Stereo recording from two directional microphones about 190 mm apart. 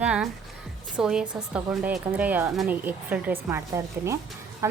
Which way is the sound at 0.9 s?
5° right (ahead or behind).